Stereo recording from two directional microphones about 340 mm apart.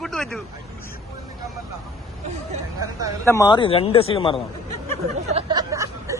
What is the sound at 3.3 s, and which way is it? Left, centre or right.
Speech, centre.